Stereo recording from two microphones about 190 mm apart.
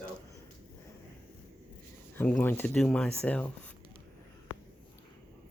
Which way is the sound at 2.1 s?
10° left (ahead or behind).